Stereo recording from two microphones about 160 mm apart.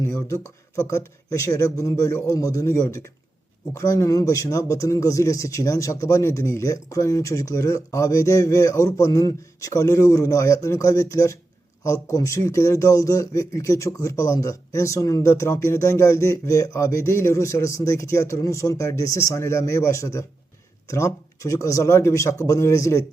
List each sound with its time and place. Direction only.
0.1 s speech: 15° left (ahead or behind)